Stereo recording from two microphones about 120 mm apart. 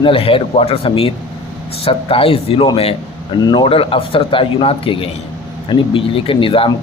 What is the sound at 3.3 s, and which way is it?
Speech, 35° left (ahead or behind).